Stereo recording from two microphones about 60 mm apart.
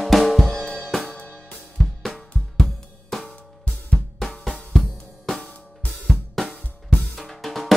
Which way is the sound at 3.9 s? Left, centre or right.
Centre.